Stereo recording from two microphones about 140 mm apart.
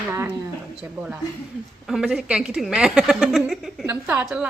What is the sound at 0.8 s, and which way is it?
A woman's voice, 5° right (ahead or behind).